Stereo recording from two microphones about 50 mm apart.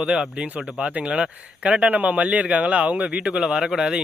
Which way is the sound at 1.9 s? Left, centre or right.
Right.